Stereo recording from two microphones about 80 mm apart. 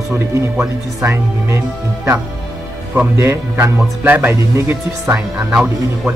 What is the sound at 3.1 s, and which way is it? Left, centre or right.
Music, right.